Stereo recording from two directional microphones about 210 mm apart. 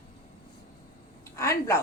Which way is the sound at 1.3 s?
15° left (ahead or behind).